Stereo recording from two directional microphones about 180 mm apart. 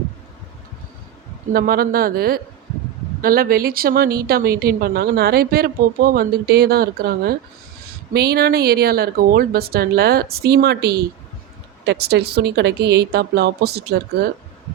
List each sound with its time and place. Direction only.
1.5 s a woman's voice: 55° right (ahead or behind)